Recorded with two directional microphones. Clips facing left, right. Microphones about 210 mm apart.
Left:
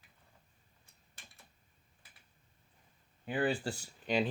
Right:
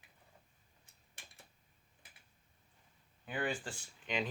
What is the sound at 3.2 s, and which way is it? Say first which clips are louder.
Speech: left 6 dB; 30° left (ahead or behind).